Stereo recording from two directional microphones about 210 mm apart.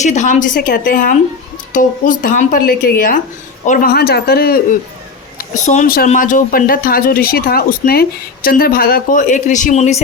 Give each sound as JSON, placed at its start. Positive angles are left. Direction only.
{"t": 0.0, "sound": "speech", "side_deg": 35}
{"t": 5.4, "sound": "speech", "side_deg": 35}